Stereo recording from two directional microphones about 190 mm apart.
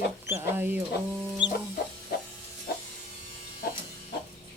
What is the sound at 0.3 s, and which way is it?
Chicken, 10° right (ahead or behind).